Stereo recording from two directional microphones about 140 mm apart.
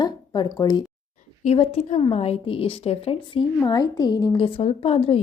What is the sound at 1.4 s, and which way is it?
A woman's voice, 45° left (ahead or behind).